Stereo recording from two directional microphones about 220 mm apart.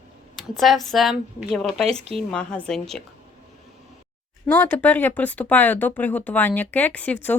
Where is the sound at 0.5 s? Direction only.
Centre (ahead or behind).